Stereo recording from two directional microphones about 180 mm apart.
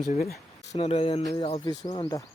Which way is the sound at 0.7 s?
35° left (ahead or behind).